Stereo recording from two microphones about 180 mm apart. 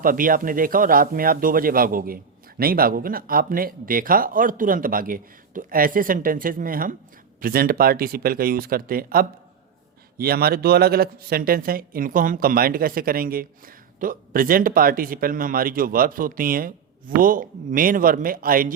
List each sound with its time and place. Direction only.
0.0 s speech: 50° right (ahead or behind)